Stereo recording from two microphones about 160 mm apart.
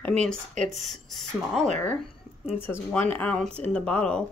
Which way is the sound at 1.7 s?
50° right (ahead or behind).